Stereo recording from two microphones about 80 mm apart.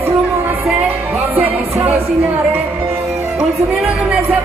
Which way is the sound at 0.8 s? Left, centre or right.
Right.